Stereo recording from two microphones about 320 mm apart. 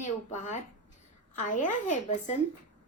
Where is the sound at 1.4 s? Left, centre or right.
Left.